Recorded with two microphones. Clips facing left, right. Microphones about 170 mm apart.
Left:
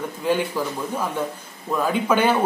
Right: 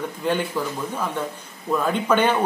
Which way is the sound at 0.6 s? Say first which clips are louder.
Left 1 dB; 5° left (ahead or behind).